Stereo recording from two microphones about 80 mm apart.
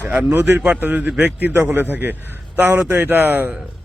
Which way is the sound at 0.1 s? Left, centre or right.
Centre.